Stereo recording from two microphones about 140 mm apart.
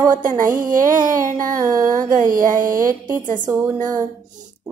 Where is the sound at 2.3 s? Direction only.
75° right (ahead or behind).